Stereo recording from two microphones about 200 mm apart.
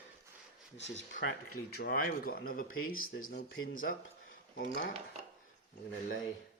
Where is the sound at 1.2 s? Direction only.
50° left (ahead or behind).